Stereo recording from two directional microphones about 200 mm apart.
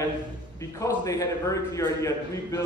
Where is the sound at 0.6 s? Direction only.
15° left (ahead or behind).